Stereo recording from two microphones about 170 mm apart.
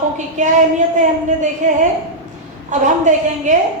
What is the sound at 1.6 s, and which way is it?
A woman's voice, 45° right (ahead or behind).